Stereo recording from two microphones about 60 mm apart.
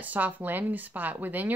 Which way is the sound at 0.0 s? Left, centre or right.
Right.